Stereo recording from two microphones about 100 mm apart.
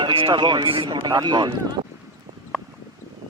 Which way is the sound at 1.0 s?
50° right (ahead or behind).